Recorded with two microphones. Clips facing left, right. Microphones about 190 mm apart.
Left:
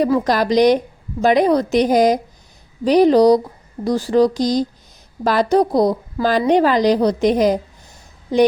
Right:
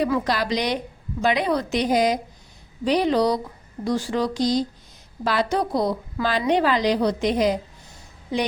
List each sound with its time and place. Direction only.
0.0 s a woman's voice: 45° left (ahead or behind)